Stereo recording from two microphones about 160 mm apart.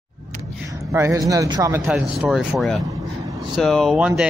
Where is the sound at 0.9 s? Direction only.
20° right (ahead or behind).